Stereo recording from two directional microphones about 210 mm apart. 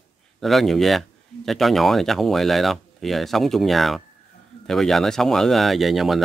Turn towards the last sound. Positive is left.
turn(degrees=0)  # may be behind; listen again after turning